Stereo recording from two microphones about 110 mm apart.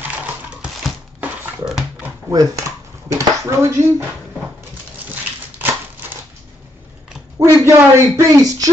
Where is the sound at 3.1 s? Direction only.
25° right (ahead or behind).